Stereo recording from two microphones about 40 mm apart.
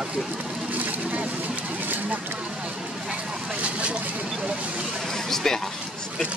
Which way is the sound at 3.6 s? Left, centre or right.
Right.